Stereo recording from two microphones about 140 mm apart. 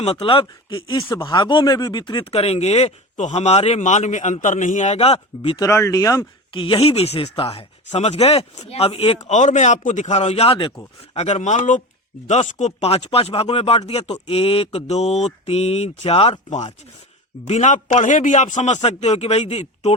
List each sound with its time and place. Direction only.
0.0 s speech: 45° left (ahead or behind)
2.3 s speech: 50° left (ahead or behind)
5.5 s speech: 20° left (ahead or behind)
6.5 s a man's voice: 35° left (ahead or behind)